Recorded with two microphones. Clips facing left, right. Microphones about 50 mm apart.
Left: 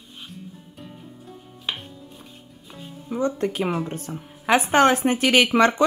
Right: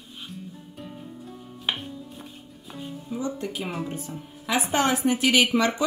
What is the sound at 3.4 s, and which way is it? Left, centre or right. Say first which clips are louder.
A woman's voice: left 7 dB; left.